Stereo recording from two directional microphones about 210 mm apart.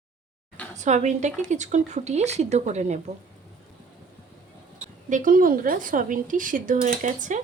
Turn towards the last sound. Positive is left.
turn(degrees=-35)  # may be behind; listen again after turning